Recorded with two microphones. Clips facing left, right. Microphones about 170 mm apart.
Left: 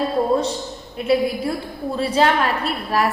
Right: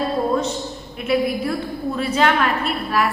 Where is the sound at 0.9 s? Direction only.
30° left (ahead or behind).